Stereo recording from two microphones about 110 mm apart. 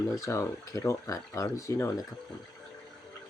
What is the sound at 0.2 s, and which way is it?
Speech, 30° left (ahead or behind).